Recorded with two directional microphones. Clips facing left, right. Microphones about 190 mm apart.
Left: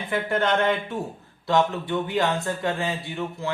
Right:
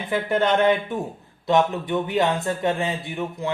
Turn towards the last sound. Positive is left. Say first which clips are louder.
# right 2 dB
turn(degrees=-20)  # may be behind; listen again after turning